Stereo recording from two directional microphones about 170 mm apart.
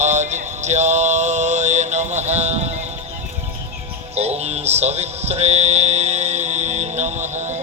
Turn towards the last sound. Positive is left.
turn(degrees=-45)  # may be behind; listen again after turning